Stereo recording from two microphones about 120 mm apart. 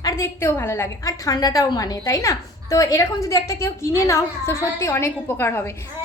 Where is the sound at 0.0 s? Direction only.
25° left (ahead or behind).